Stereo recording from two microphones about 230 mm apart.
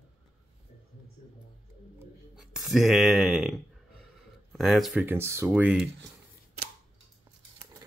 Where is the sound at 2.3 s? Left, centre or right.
Centre.